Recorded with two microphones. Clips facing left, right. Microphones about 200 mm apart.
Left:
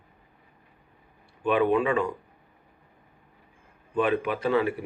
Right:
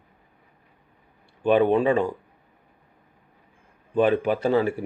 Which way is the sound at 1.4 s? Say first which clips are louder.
Right 4 dB; 35° right (ahead or behind).